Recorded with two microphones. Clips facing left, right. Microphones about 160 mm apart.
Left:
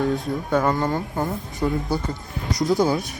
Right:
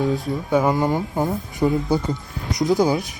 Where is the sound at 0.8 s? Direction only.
20° right (ahead or behind).